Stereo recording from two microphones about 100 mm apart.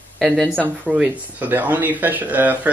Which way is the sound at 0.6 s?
15° right (ahead or behind).